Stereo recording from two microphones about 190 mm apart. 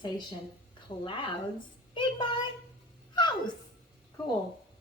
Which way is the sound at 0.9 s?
25° left (ahead or behind).